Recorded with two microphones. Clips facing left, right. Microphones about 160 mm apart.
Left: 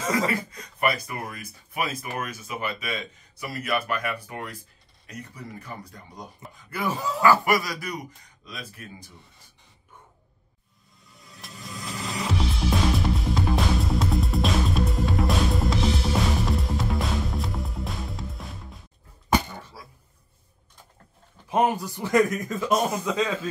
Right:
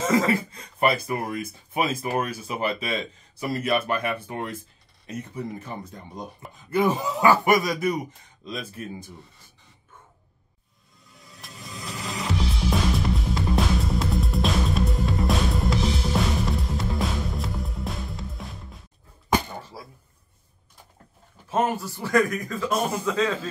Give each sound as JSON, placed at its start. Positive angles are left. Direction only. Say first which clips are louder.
{"t": 0.3, "sound": "speech", "louder": "right 5 dB", "side_deg": -30}
{"t": 11.1, "sound": "music", "louder": "even", "side_deg": 0}
{"t": 21.5, "sound": "speech", "louder": "left 1 dB", "side_deg": 15}